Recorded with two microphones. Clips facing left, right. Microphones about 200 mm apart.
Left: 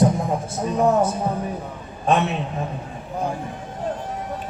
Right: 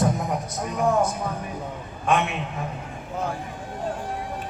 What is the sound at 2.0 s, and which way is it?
Speech, 35° left (ahead or behind).